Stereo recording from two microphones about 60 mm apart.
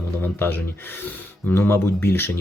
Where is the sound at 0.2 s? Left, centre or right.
Left.